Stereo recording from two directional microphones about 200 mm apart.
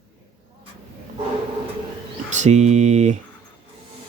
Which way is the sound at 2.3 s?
35° right (ahead or behind).